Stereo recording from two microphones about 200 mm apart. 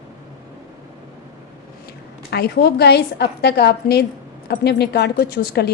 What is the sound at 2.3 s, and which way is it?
A woman's voice, 55° left (ahead or behind).